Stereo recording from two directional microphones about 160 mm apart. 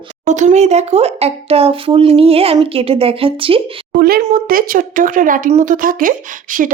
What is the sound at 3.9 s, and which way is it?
Speech, 70° right (ahead or behind).